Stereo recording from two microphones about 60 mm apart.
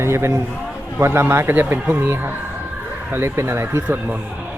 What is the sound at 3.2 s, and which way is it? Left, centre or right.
Speech, right.